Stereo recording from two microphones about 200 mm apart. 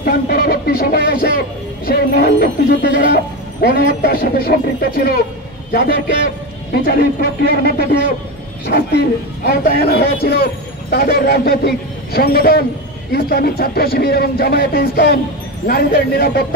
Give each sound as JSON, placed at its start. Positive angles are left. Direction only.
{"t": 0.0, "sound": "a man's voice", "side_deg": 50}